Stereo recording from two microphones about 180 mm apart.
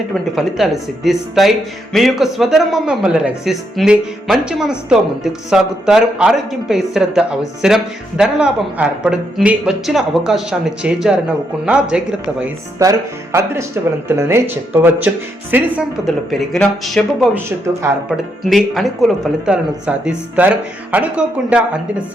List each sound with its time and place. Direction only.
0.1 s speech: centre (ahead or behind)
12.8 s speech: 15° right (ahead or behind); by 17.2 s centre (ahead or behind)
17.7 s speech: 15° right (ahead or behind)
18.4 s speech: centre (ahead or behind)